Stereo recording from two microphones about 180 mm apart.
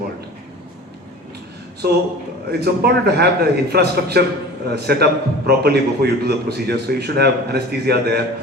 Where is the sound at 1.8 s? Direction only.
65° right (ahead or behind).